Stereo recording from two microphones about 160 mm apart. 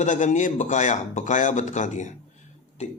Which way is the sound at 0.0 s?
50° left (ahead or behind).